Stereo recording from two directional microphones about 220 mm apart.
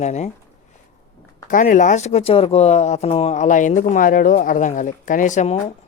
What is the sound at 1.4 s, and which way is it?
Speech, 35° left (ahead or behind).